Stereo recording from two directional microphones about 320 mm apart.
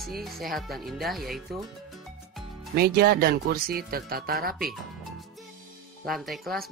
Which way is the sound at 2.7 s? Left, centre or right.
Right.